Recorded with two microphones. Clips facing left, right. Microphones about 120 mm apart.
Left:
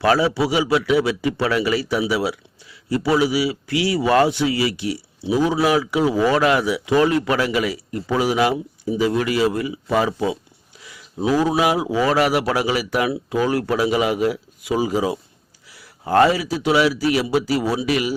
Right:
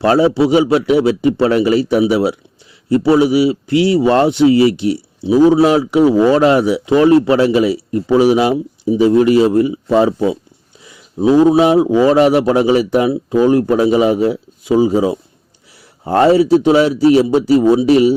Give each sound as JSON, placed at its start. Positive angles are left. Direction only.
{"t": 0.0, "sound": "a man's voice", "side_deg": -30}